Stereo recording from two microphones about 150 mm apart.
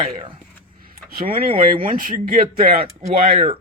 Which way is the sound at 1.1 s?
80° right.